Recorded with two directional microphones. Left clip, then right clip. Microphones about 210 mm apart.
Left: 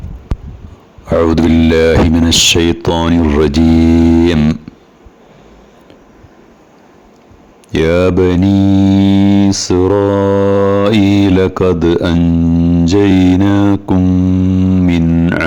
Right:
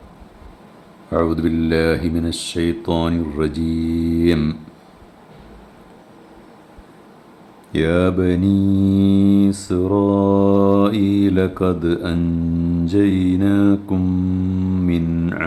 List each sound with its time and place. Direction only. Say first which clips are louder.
1.2 s mantra: left 9 dB; 45° left (ahead or behind)
7.7 s mantra: left 7 dB; 35° left (ahead or behind)
12.2 s mantra: left 9 dB; 25° left (ahead or behind)
12.8 s mantra: left 7 dB; 35° left (ahead or behind)
13.9 s mantra: left 8 dB; 20° left (ahead or behind)
15.1 s a sound: left 10 dB; 25° left (ahead or behind)